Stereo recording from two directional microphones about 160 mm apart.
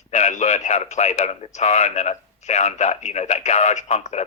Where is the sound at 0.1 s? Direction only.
45° left (ahead or behind).